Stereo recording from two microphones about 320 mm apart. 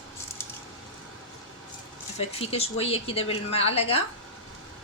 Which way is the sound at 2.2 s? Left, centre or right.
Centre.